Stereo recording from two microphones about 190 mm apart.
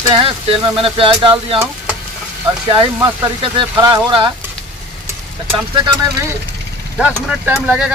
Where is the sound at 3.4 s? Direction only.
25° right (ahead or behind).